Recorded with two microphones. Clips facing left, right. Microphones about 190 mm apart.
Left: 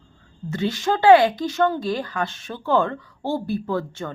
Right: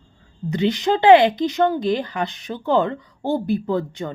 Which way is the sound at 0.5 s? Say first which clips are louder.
Right 4 dB; 20° right (ahead or behind).